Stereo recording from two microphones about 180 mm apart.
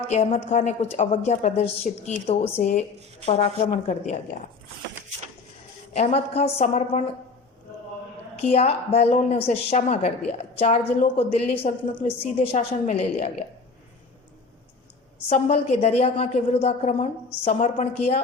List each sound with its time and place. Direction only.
0.1 s a woman's voice: 40° left (ahead or behind)
5.9 s a woman's voice: 35° left (ahead or behind)
8.4 s a woman's voice: 35° left (ahead or behind)
15.3 s a woman's voice: 35° left (ahead or behind)